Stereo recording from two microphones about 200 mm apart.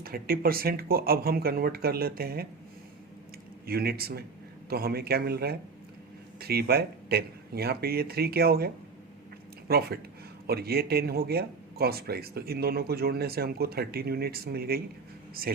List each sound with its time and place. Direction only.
0.0 s speech: 45° right (ahead or behind)
3.7 s speech: 50° right (ahead or behind)